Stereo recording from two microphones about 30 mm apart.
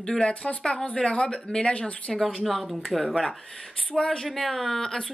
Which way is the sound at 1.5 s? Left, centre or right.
Left.